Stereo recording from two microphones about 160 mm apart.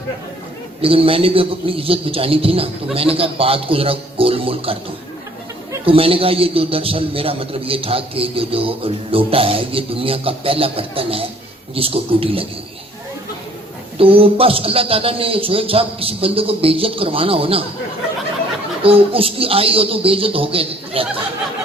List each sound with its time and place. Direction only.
0.8 s a man's voice: 35° right (ahead or behind)
5.8 s a man's voice: 35° right (ahead or behind)
14.0 s a man's voice: 35° right (ahead or behind)
18.8 s a man's voice: 35° right (ahead or behind)